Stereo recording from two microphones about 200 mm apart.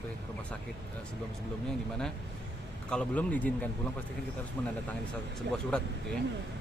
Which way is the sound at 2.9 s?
5° left (ahead or behind).